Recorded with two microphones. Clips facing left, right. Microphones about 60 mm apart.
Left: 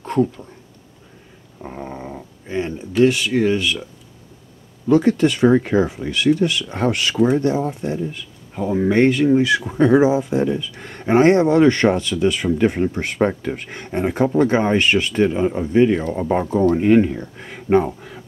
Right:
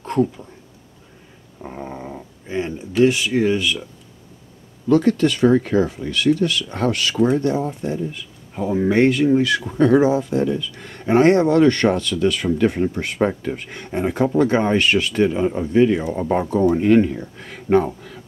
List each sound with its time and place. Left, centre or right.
0.0 s speech: centre
1.6 s a sound: centre
4.8 s speech: centre
7.2 s speech: centre
9.7 s speech: centre